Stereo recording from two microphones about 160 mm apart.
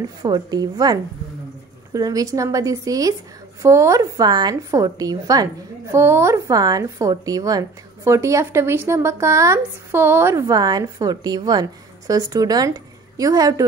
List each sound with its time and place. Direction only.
0.2 s a woman's voice: 25° right (ahead or behind)
2.0 s a woman's voice: 20° right (ahead or behind)